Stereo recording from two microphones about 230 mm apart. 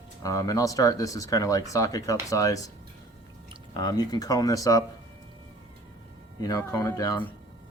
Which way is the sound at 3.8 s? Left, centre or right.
Centre.